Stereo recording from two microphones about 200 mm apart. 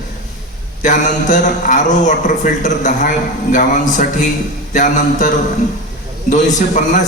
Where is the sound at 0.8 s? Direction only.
40° left (ahead or behind).